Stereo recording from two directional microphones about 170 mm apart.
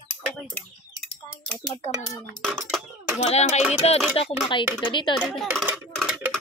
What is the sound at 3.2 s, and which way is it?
Speech, 40° left (ahead or behind).